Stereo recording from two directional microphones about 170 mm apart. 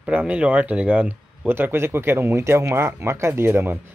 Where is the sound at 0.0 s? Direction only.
5° right (ahead or behind).